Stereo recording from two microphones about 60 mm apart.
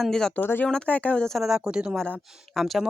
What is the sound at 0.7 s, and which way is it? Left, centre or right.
Speech, centre.